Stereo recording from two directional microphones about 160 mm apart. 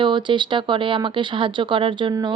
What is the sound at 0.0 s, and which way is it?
Speech, 30° right (ahead or behind).